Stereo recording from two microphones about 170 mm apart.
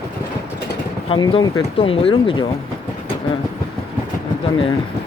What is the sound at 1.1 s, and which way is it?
Speech, 30° left (ahead or behind).